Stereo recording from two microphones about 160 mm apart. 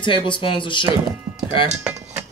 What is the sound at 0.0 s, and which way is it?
Speech, 30° left (ahead or behind).